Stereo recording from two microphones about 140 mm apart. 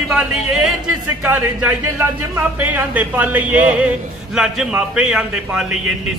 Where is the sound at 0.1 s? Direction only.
5° right (ahead or behind).